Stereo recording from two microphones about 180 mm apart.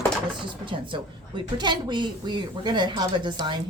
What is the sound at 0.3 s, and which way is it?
A woman's voice, 25° right (ahead or behind).